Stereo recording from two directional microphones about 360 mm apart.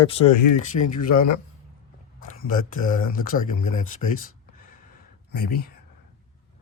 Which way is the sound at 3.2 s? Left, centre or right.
Left.